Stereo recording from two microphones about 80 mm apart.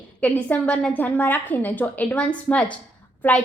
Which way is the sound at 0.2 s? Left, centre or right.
Centre.